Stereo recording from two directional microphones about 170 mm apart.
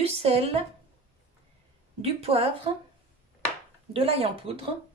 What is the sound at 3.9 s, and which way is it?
Speech, 35° right (ahead or behind).